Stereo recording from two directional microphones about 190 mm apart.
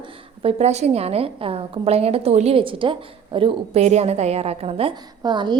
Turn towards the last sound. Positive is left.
turn(degrees=-25)  # may be behind; listen again after turning